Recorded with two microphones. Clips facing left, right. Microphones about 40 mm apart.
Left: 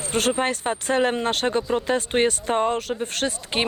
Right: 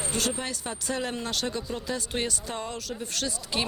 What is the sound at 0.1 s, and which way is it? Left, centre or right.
Speech, left.